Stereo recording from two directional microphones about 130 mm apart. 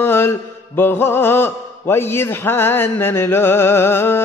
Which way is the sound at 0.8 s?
15° left (ahead or behind).